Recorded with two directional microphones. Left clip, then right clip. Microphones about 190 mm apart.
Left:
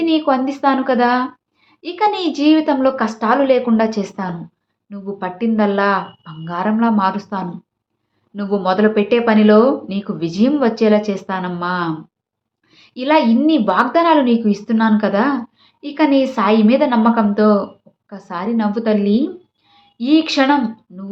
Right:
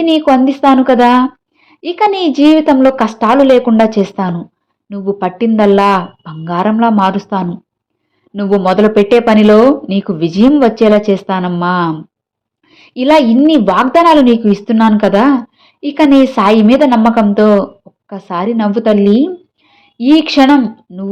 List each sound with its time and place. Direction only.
0.0 s a woman's voice: 35° right (ahead or behind)